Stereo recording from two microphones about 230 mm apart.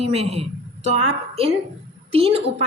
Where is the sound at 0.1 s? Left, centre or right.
Right.